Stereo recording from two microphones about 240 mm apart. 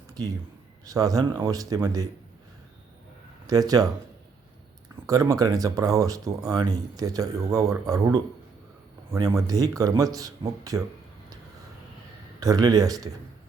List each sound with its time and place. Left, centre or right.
0.9 s speech: centre
3.4 s speech: centre
5.0 s speech: centre
12.4 s speech: centre